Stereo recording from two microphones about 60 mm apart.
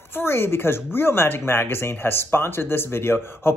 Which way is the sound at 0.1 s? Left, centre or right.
Left.